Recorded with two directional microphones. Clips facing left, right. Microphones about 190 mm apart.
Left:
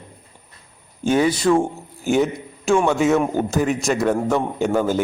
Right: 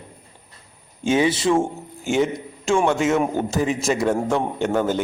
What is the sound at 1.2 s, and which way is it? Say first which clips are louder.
Speech: left 2 dB; 25° right (ahead or behind).